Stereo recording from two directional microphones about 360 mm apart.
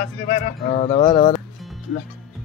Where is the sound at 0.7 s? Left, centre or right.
Centre.